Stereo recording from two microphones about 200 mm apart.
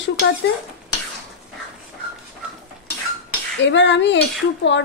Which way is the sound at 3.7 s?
65° left (ahead or behind).